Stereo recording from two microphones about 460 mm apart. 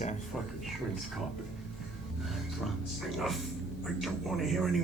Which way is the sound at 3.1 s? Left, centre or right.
Centre.